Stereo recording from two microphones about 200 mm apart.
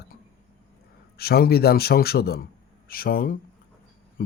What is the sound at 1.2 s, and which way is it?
Speech, 50° left (ahead or behind).